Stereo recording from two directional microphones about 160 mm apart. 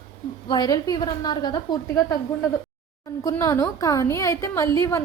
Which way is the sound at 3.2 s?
20° left (ahead or behind).